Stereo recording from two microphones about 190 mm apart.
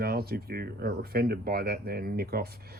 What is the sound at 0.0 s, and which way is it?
Speech, 55° right (ahead or behind).